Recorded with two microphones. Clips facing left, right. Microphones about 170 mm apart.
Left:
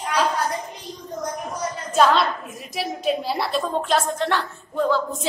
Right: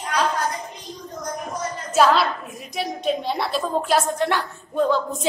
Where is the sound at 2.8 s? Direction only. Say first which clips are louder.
Even; 5° left (ahead or behind).